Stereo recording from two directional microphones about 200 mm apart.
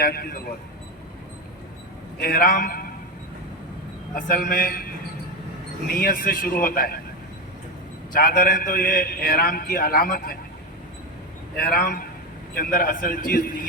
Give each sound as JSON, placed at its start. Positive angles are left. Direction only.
{"t": 0.0, "sound": "a man's voice", "side_deg": 50}
{"t": 2.2, "sound": "a man's voice", "side_deg": 45}
{"t": 4.1, "sound": "a man's voice", "side_deg": 45}
{"t": 5.9, "sound": "a man's voice", "side_deg": 45}
{"t": 8.1, "sound": "a man's voice", "side_deg": 45}
{"t": 11.5, "sound": "a man's voice", "side_deg": 50}